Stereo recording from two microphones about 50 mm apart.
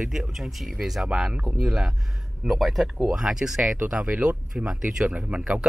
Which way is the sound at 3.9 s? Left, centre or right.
Right.